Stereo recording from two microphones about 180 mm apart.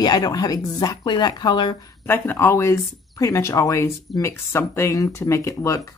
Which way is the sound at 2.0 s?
10° left (ahead or behind).